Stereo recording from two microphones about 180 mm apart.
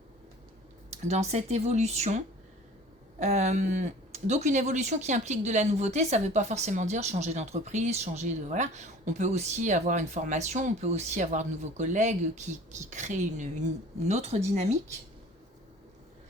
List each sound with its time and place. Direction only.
0.9 s speech: 40° right (ahead or behind)